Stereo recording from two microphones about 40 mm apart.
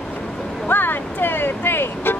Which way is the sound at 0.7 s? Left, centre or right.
Left.